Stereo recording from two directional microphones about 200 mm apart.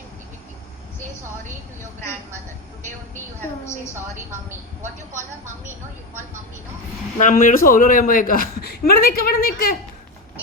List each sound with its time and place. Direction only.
7.2 s speech: 40° left (ahead or behind)